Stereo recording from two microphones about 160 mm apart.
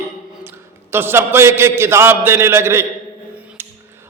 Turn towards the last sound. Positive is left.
turn(degrees=-15)  # may be behind; listen again after turning